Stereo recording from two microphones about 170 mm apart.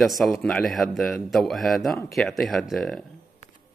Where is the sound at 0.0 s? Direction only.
Centre (ahead or behind).